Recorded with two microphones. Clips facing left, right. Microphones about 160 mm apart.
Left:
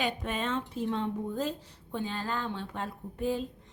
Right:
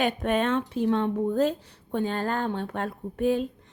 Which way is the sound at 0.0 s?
60° right (ahead or behind).